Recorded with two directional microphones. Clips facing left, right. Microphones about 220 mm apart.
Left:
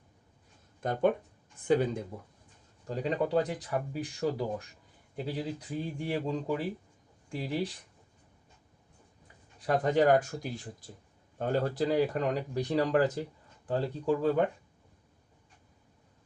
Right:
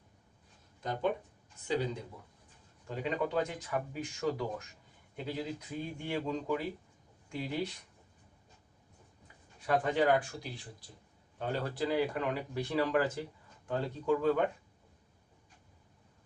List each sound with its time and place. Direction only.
0.8 s speech: 50° left (ahead or behind)
2.8 s speech: 40° left (ahead or behind)
9.6 s speech: 40° left (ahead or behind)